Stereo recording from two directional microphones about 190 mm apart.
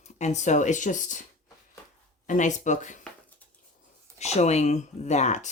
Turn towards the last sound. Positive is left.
turn(degrees=35)  # may be behind; listen again after turning